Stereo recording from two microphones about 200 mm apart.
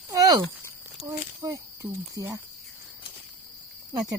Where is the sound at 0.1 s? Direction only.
15° right (ahead or behind).